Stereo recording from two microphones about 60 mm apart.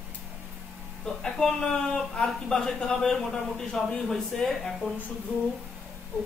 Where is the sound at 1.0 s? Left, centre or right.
Centre.